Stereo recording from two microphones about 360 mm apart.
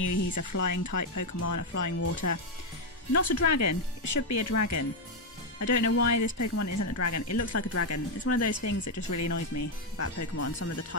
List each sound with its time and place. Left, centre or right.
0.0 s speech: left